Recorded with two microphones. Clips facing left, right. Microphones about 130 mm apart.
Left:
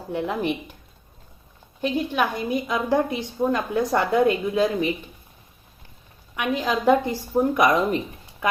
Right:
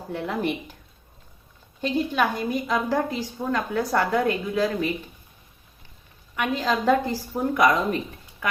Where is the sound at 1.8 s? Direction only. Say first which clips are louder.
Even; 15° left (ahead or behind).